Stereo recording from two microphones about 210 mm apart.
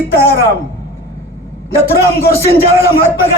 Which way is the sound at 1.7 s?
45° left (ahead or behind).